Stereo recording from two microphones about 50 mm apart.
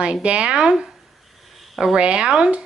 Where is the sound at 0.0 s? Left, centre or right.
Right.